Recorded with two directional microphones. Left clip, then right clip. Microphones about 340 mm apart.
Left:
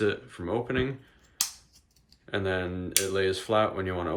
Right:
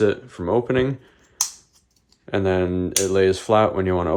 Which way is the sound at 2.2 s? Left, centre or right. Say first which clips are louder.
Right 9 dB; centre.